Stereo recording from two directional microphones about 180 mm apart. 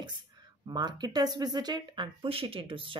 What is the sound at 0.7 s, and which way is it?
Speech, 25° right (ahead or behind).